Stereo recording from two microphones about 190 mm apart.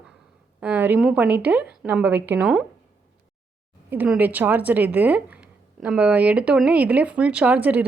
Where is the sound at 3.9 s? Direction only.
10° right (ahead or behind).